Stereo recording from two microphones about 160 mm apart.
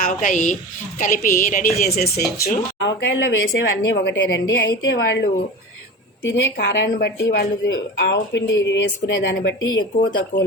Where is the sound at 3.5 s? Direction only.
90° left.